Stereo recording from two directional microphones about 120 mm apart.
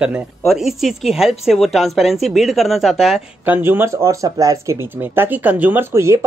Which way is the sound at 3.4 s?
15° right (ahead or behind).